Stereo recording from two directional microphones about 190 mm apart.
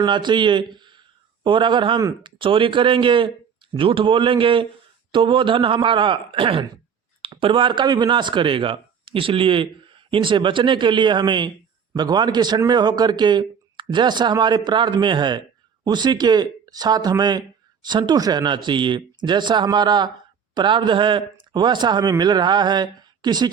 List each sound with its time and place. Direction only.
0.0 s speech: 25° right (ahead or behind)